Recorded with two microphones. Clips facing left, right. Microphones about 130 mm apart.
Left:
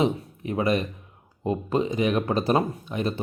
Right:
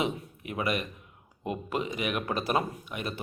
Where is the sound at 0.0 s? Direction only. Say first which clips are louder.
Left 7 dB; 30° left (ahead or behind).